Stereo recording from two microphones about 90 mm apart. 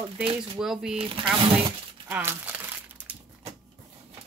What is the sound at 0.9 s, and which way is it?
Speech, 75° right (ahead or behind).